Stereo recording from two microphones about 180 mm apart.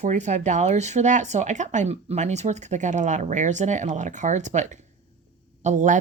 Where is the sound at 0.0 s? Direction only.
40° right (ahead or behind).